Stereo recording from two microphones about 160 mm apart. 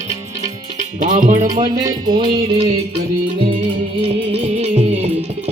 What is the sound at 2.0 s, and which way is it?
Music, 30° right (ahead or behind).